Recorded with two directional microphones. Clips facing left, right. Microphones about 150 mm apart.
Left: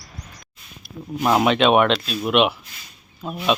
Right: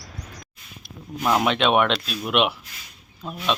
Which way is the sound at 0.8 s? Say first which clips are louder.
Left 7 dB; 5° left (ahead or behind).